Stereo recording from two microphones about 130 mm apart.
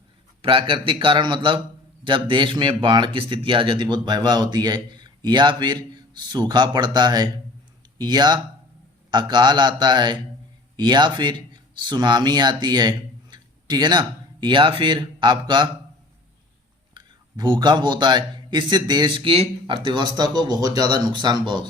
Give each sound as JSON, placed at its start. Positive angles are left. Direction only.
{"t": 0.4, "sound": "speech", "side_deg": -40}
{"t": 13.3, "sound": "a sound", "side_deg": -35}
{"t": 14.4, "sound": "speech", "side_deg": -40}
{"t": 16.9, "sound": "speech", "side_deg": -35}